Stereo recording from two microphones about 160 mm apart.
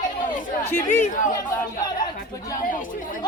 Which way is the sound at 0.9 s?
50° left (ahead or behind).